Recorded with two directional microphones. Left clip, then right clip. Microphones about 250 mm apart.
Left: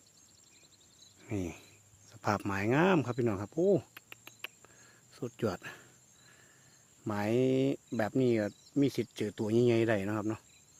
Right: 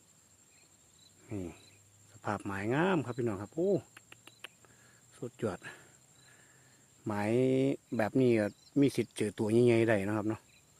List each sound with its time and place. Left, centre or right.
1.3 s speech: left
3.7 s cricket: left
5.1 s speech: centre
7.0 s speech: centre